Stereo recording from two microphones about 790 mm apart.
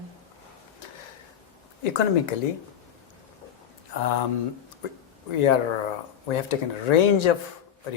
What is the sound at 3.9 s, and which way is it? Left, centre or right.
Speech, left.